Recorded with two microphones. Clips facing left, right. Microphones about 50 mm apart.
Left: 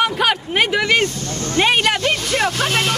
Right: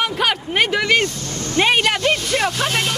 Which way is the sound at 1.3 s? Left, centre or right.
Left.